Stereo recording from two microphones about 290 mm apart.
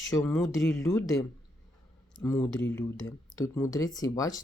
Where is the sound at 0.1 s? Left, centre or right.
Centre.